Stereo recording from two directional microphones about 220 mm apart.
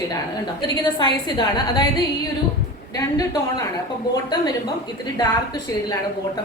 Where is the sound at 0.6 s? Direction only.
20° left (ahead or behind).